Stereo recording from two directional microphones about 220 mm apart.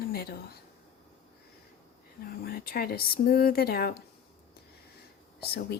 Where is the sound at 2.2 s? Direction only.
45° left (ahead or behind).